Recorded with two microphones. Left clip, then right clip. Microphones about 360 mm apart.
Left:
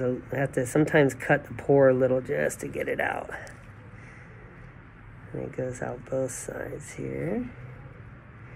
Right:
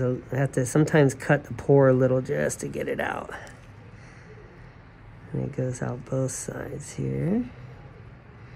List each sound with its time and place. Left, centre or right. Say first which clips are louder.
0.0 s speech: even; right
5.7 s speech: even; right
7.1 s speech: right 2 dB; right